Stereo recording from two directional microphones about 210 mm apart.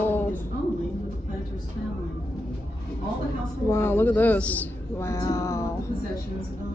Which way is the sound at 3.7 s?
10° left (ahead or behind).